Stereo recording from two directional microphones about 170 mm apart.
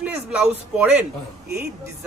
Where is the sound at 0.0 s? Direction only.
5° right (ahead or behind).